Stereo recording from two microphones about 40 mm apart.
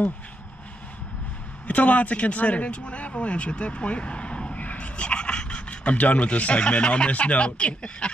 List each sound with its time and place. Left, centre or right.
1.7 s speech: left
4.6 s a sound: left
6.6 s speech: left